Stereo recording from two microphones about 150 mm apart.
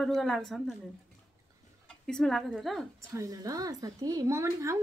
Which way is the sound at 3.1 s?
20° right (ahead or behind).